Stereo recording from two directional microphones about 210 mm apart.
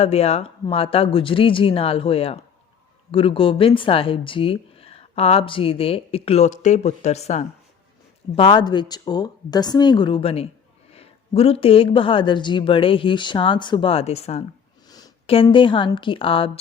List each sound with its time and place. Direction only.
0.0 s speech: 30° left (ahead or behind)
14.8 s a sound: 20° left (ahead or behind)
15.4 s speech: 25° left (ahead or behind)